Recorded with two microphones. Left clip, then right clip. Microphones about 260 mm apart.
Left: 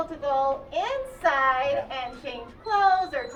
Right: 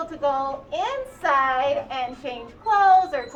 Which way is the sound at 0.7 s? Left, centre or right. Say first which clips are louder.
Right 2 dB; centre.